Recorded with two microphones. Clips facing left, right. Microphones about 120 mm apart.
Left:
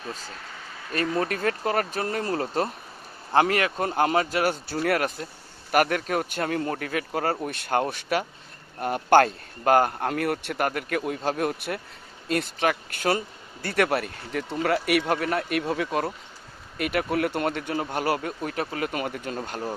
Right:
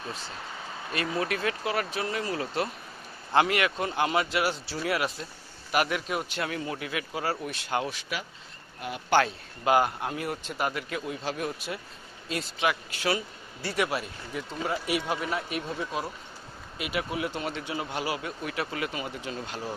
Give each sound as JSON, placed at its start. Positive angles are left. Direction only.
{"t": 0.9, "sound": "speech", "side_deg": 40}
{"t": 10.1, "sound": "speech", "side_deg": 60}